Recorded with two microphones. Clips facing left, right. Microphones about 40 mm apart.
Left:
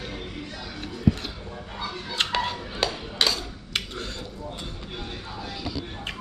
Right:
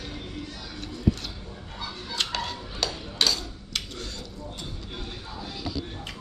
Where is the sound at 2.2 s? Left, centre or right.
Left.